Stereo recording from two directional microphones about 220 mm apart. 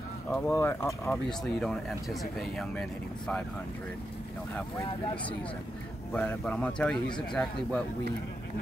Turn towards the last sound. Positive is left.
turn(degrees=5)  # may be behind; listen again after turning